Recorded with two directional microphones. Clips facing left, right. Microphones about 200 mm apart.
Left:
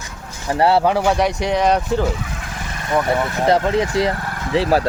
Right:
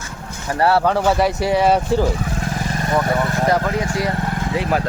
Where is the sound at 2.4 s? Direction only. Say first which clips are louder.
Right 7 dB; 35° right (ahead or behind).